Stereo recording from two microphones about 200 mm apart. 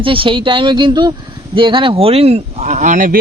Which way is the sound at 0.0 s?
25° right (ahead or behind).